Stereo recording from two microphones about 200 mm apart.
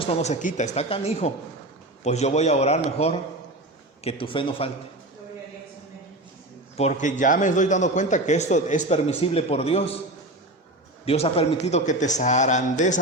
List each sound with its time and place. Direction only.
0.0 s a man's voice: 30° left (ahead or behind)
6.7 s speech: 35° left (ahead or behind)
11.0 s speech: 30° left (ahead or behind)